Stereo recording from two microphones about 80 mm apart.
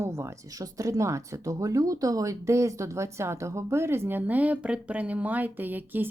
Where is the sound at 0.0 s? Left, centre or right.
Right.